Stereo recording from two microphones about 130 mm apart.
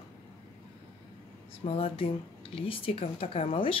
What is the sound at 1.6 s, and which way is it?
Speech, 45° left (ahead or behind).